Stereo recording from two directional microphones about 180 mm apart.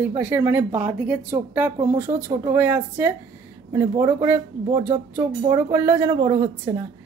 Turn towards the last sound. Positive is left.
turn(degrees=-15)  # may be behind; listen again after turning